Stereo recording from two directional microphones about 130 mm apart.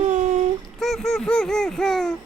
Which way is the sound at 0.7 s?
Centre (ahead or behind).